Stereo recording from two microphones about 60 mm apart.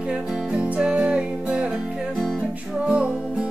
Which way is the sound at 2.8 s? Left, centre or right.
Centre.